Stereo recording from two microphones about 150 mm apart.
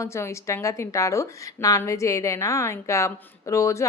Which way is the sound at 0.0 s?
20° left (ahead or behind).